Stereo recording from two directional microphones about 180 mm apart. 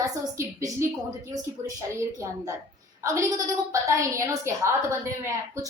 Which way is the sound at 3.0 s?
15° right (ahead or behind).